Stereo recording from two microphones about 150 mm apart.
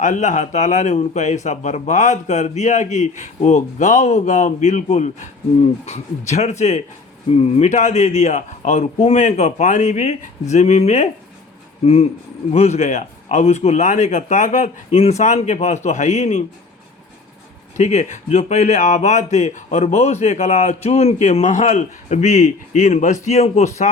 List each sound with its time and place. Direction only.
0.0 s speech: 55° left (ahead or behind)
17.7 s speech: 50° left (ahead or behind)